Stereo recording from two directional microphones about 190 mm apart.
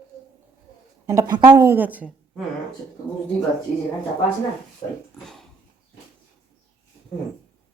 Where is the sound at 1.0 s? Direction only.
15° right (ahead or behind).